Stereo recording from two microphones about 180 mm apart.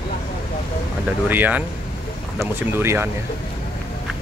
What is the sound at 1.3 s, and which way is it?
Speech, 10° right (ahead or behind).